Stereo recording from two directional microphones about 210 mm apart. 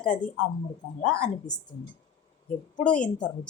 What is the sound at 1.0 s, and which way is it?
Speech, 5° left (ahead or behind).